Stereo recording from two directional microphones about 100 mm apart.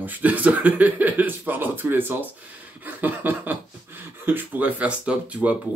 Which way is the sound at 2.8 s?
20° right (ahead or behind).